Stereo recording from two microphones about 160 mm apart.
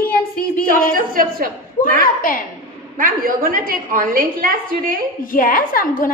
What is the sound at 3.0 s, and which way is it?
A woman's voice, 60° right (ahead or behind).